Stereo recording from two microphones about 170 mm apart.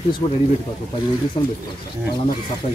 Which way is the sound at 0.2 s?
35° left (ahead or behind).